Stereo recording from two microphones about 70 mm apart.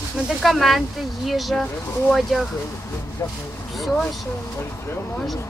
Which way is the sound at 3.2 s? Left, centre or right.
Left.